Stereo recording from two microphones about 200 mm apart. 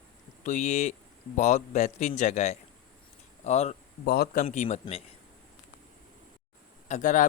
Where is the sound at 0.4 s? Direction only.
35° left (ahead or behind).